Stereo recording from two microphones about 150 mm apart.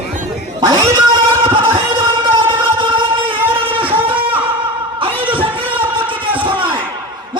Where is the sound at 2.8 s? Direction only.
35° right (ahead or behind).